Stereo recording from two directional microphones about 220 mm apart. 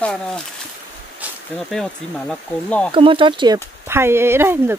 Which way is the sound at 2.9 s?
25° right (ahead or behind).